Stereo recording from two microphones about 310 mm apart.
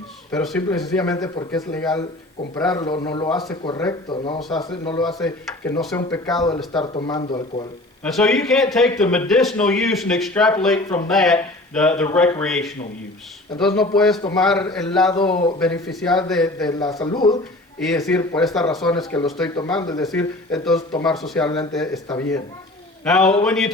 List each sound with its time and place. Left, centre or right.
0.3 s speech: centre
2.8 s speech: centre
3.2 s speech: centre
3.5 s speech: centre
5.0 s speech: centre
6.7 s speech: centre
8.0 s speech: centre
15.1 s speech: centre
16.6 s speech: centre
17.7 s speech: centre
18.2 s speech: centre
18.4 s speech: centre
20.1 s speech: centre
23.0 s speech: centre